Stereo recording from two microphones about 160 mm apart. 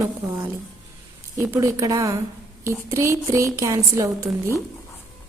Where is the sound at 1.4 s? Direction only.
15° right (ahead or behind).